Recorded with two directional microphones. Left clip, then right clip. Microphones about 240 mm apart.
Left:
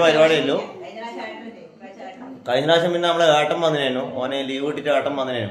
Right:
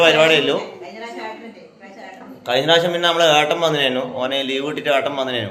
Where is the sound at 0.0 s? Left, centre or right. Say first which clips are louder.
Right 2 dB; centre.